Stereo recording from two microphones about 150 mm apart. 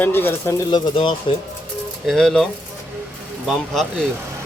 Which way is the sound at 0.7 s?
30° left (ahead or behind).